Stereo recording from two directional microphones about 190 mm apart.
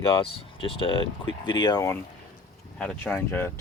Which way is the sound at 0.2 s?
30° left (ahead or behind).